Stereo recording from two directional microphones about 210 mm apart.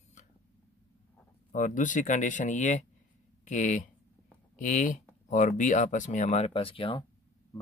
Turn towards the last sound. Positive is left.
turn(degrees=25)  # may be behind; listen again after turning